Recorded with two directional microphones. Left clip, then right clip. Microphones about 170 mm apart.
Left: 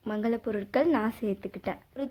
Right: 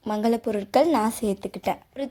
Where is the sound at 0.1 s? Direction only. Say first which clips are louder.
Right 6 dB; 20° right (ahead or behind).